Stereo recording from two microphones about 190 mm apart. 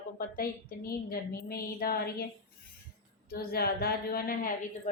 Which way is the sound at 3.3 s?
55° left (ahead or behind).